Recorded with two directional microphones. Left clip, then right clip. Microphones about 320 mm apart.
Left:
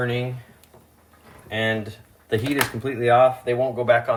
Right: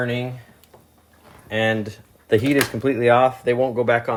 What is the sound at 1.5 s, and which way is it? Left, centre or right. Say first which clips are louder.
Speech: right 3 dB; right.